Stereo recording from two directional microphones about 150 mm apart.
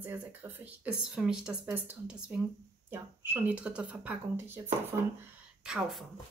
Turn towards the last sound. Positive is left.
turn(degrees=0)  # may be behind; listen again after turning